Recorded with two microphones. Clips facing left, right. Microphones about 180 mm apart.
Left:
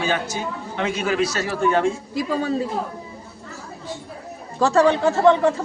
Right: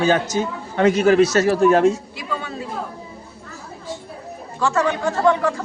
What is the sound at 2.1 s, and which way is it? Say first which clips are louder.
Speech: left 7 dB; 40° left (ahead or behind).